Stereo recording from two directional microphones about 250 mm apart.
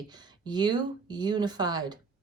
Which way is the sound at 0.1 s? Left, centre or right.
Centre.